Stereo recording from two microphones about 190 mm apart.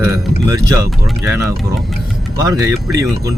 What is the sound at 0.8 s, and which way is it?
Speech, centre (ahead or behind).